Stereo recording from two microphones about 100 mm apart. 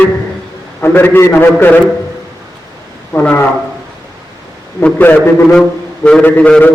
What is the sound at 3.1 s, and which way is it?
Speech, 15° left (ahead or behind).